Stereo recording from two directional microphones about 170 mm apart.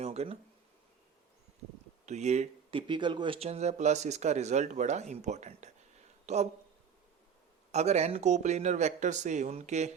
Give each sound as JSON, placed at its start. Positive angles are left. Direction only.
{"t": 0.0, "sound": "a sound", "side_deg": -40}
{"t": 2.0, "sound": "speech", "side_deg": -40}
{"t": 7.7, "sound": "speech", "side_deg": -40}